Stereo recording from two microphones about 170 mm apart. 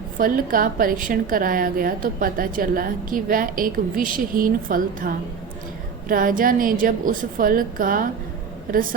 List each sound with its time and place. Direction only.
0.2 s a woman's voice: 55° right (ahead or behind)